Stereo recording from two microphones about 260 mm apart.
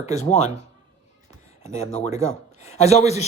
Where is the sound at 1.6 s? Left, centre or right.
Left.